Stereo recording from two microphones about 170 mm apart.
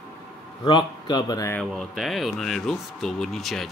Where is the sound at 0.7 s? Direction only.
25° left (ahead or behind).